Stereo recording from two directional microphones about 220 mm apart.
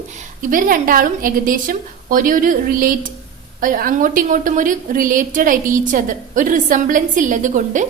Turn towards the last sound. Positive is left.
turn(degrees=-35)  # may be behind; listen again after turning